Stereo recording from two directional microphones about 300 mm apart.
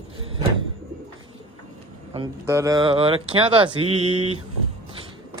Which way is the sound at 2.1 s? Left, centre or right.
Centre.